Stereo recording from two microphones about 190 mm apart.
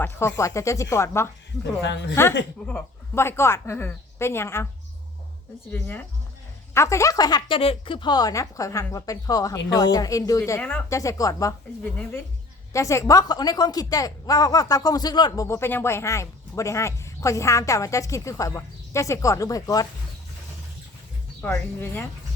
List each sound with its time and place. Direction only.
0.0 s a woman's voice: 15° left (ahead or behind)
1.8 s speech: 65° left (ahead or behind)
2.6 s a woman's voice: 10° left (ahead or behind)
5.7 s a woman's voice: 10° left (ahead or behind)
21.4 s a woman's voice: 10° left (ahead or behind)